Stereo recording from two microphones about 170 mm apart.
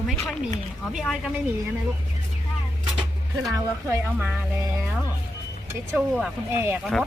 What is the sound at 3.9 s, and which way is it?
Speech, 10° right (ahead or behind).